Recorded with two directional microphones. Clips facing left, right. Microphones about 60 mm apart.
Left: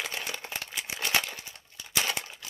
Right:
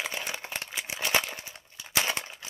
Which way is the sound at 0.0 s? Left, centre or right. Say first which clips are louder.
Right 1 dB; centre.